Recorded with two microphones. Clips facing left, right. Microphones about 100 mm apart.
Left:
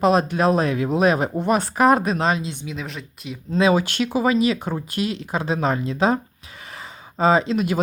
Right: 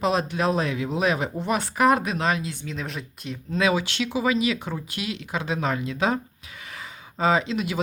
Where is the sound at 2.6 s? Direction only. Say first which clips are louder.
Left 1 dB; centre (ahead or behind).